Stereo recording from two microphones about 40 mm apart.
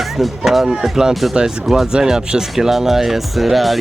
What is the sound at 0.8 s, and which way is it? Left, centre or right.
Speech, centre.